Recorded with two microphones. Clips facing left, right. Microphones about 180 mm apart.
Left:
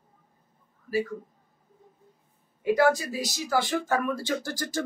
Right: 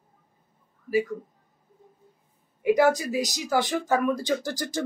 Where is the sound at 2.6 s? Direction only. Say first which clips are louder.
Right 2 dB; 15° right (ahead or behind).